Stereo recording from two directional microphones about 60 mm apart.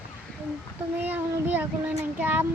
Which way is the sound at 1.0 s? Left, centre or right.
Right.